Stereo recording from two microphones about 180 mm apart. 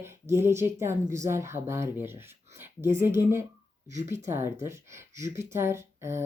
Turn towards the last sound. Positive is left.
turn(degrees=-15)  # may be behind; listen again after turning